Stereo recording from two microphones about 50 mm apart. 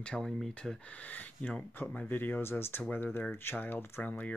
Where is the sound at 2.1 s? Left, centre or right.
Left.